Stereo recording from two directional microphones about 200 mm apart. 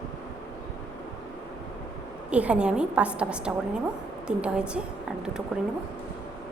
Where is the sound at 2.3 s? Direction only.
5° right (ahead or behind).